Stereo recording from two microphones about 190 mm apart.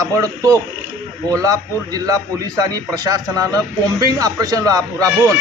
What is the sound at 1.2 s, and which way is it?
A man's voice, 20° right (ahead or behind).